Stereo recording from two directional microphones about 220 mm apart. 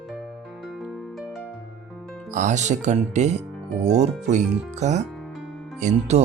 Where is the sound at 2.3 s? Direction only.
35° right (ahead or behind).